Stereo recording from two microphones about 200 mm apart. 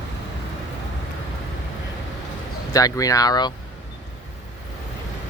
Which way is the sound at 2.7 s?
15° left (ahead or behind).